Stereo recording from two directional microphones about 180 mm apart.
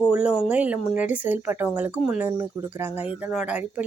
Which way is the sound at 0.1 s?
5° right (ahead or behind).